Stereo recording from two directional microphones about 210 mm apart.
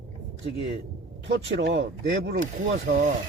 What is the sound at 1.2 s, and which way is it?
Speech, 60° right (ahead or behind).